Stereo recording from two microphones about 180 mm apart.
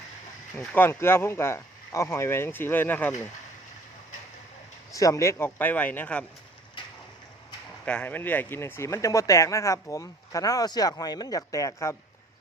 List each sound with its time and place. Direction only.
0.5 s speech: 10° left (ahead or behind)
4.9 s speech: 20° left (ahead or behind)
7.9 s speech: 10° left (ahead or behind)